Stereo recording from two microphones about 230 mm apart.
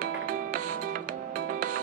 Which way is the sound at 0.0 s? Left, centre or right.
Right.